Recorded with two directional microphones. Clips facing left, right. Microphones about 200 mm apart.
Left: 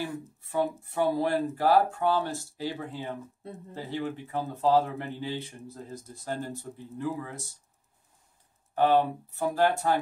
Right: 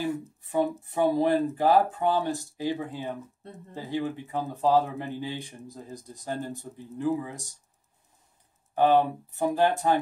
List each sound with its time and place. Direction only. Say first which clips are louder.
0.0 s speech: right 5 dB; 15° right (ahead or behind)
8.7 s speech: right 2 dB; 15° right (ahead or behind)